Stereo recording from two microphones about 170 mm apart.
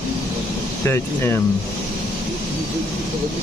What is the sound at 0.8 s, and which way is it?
Speech, 15° left (ahead or behind).